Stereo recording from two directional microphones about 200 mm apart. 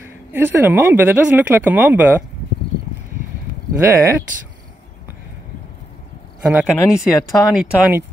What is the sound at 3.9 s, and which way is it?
Speech, 10° right (ahead or behind).